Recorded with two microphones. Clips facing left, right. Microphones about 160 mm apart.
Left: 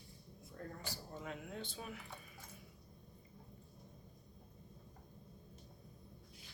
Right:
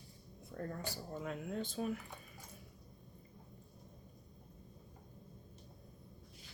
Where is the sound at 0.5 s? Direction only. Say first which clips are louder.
Right 6 dB; 65° right (ahead or behind).